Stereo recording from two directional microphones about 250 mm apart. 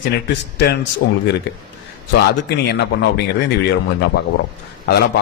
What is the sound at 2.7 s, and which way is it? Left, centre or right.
Speech, left.